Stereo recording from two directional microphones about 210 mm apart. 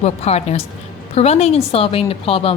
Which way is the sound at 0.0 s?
30° left (ahead or behind).